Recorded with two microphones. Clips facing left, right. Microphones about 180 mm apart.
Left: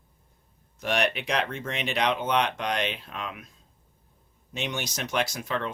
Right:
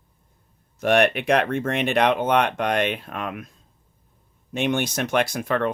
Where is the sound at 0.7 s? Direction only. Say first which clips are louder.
Right 8 dB; 55° right (ahead or behind).